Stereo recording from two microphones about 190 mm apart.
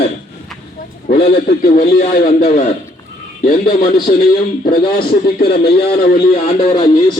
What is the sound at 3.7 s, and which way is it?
A man's voice, 50° left (ahead or behind).